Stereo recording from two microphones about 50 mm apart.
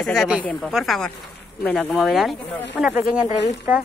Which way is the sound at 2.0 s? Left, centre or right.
Centre.